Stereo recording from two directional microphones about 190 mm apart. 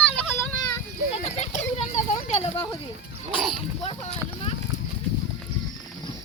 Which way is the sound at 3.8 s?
35° left (ahead or behind).